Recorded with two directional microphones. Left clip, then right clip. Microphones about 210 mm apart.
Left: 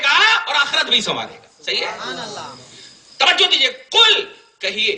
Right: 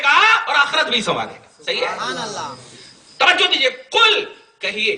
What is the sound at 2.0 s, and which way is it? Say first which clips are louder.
Speech: right 3 dB; 50° right (ahead or behind).